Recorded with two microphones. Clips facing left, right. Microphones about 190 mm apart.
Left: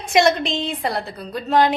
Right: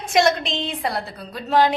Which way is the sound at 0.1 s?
Centre (ahead or behind).